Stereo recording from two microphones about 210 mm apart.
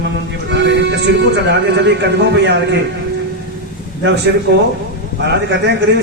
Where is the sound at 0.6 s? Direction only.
55° right (ahead or behind).